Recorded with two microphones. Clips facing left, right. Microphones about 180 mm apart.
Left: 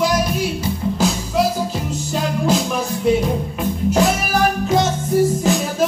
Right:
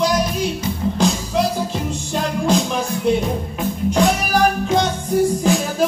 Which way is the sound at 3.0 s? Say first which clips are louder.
Left 3 dB; centre (ahead or behind).